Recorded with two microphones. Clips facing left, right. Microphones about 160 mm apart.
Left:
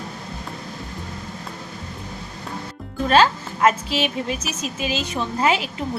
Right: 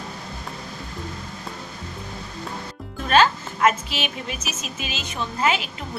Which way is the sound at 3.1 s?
30° left (ahead or behind).